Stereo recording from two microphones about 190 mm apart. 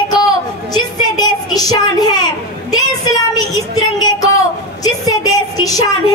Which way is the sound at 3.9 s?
20° left (ahead or behind).